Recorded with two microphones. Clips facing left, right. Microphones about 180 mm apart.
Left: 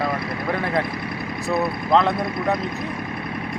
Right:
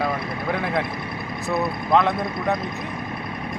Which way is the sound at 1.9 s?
Centre (ahead or behind).